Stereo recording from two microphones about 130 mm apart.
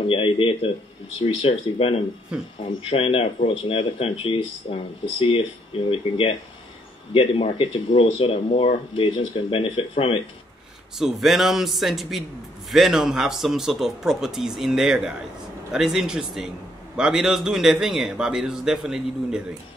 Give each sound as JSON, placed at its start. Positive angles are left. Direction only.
{"t": 0.0, "sound": "speech", "side_deg": 45}
{"t": 11.0, "sound": "a man's voice", "side_deg": 0}